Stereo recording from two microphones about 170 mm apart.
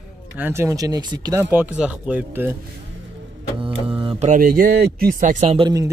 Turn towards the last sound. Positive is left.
turn(degrees=-20)  # may be behind; listen again after turning